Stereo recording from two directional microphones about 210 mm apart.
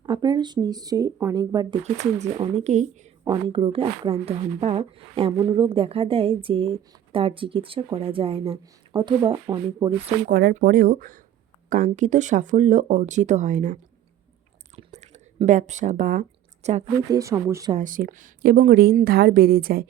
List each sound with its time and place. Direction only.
0.0 s a woman's voice: 20° right (ahead or behind)
1.8 s a woman's voice: 35° right (ahead or behind)
10.2 s a woman's voice: 40° right (ahead or behind)
14.8 s speech: 30° right (ahead or behind)
17.1 s speech: 15° right (ahead or behind)
17.7 s a woman's voice: 35° right (ahead or behind)